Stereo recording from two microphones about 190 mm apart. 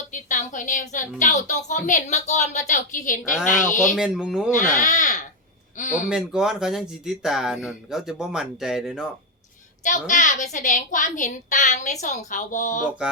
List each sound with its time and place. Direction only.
0.1 s a woman's voice: 40° left (ahead or behind)
3.9 s speech: 5° right (ahead or behind)
4.5 s a woman's voice: 45° left (ahead or behind)
6.1 s speech: 5° right (ahead or behind)
9.8 s a woman's voice: 40° left (ahead or behind)